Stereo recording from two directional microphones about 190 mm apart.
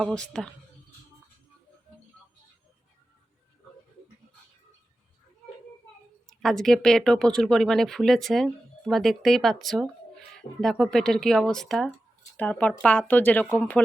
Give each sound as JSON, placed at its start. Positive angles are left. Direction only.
{"t": 0.0, "sound": "speech", "side_deg": 5}
{"t": 6.2, "sound": "speech", "side_deg": 0}